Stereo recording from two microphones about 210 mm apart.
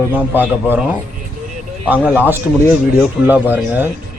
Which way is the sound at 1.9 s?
10° right (ahead or behind).